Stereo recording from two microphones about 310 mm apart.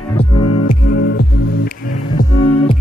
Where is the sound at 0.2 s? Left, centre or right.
Centre.